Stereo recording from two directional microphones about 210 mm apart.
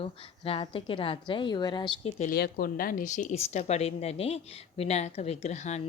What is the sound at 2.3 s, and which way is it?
Speech, 45° left (ahead or behind).